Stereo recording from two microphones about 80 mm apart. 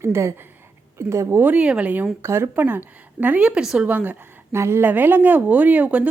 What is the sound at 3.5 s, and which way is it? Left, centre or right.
Speech, centre.